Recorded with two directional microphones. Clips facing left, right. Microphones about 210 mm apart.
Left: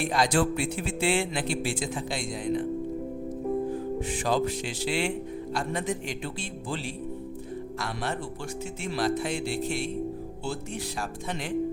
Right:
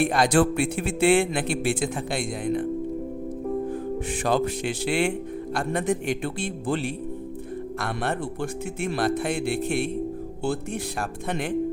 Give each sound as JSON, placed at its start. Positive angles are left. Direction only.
{"t": 0.0, "sound": "speech", "side_deg": -55}
{"t": 4.1, "sound": "speech", "side_deg": -60}
{"t": 11.3, "sound": "speech", "side_deg": -55}